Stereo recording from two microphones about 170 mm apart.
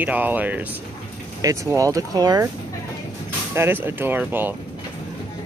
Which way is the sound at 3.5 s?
15° right (ahead or behind).